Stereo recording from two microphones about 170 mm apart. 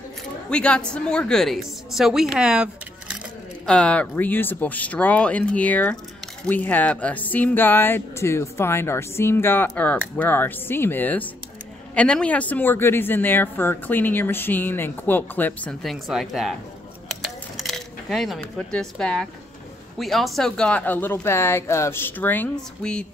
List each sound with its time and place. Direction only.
0.5 s a woman's voice: 5° left (ahead or behind)
3.6 s speech: 5° left (ahead or behind)
17.2 s a sound: centre (ahead or behind)
20.0 s speech: centre (ahead or behind)